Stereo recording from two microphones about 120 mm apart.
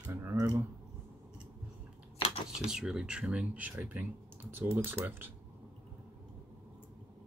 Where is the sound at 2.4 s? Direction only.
5° right (ahead or behind).